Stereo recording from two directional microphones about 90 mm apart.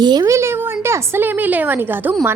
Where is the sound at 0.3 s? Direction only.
30° right (ahead or behind).